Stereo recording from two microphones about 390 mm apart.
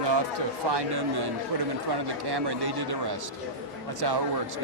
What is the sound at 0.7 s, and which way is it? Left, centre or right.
A man's voice, right.